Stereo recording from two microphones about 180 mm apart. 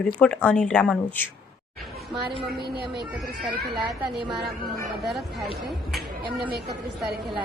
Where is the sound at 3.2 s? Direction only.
Centre (ahead or behind).